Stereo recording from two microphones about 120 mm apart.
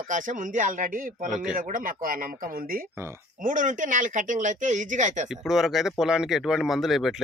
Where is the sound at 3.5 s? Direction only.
90° right.